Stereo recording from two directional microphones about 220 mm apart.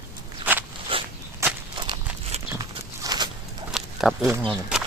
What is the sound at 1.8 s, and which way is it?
Horse, 20° right (ahead or behind).